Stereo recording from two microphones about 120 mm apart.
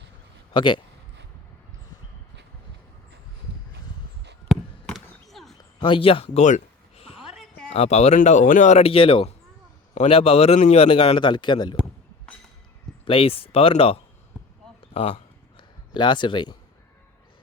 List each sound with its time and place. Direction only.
0.5 s a man's voice: 40° left (ahead or behind)
4.5 s a sound: 5° right (ahead or behind)
5.5 s speech: 40° left (ahead or behind)
6.4 s a sound: 70° left (ahead or behind)
7.7 s speech: 65° left (ahead or behind); by 8.8 s 90° left
8.8 s a man's voice: 50° left (ahead or behind)
9.9 s a man's voice: 60° left (ahead or behind); by 11.8 s 40° left (ahead or behind)
13.1 s a man's voice: 50° left (ahead or behind)
14.3 s basketball bounce: 10° right (ahead or behind)
14.9 s speech: 60° left (ahead or behind)
15.5 s a sound: 40° left (ahead or behind)